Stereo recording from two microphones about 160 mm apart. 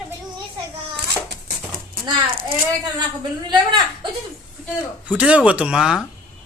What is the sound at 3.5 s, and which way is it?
Speech, 30° right (ahead or behind).